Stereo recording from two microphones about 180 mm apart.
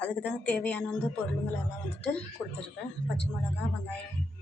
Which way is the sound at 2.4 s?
Centre (ahead or behind).